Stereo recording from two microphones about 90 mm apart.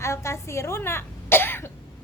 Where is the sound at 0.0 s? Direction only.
30° left (ahead or behind).